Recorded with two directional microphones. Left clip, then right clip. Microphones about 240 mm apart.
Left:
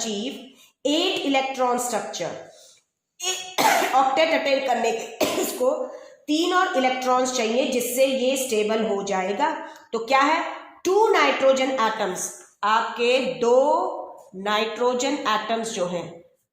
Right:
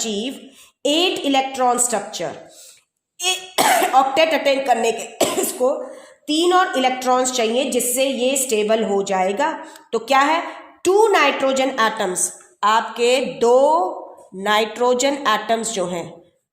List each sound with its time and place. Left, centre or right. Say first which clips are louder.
0.8 s a woman's voice: right 4 dB; right